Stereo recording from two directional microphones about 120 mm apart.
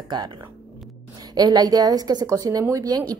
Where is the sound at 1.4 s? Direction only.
35° right (ahead or behind).